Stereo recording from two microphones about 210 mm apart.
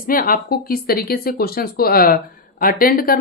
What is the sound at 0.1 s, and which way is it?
Speech, 45° left (ahead or behind).